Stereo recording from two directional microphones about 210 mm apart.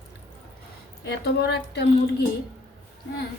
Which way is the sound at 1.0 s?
50° left (ahead or behind).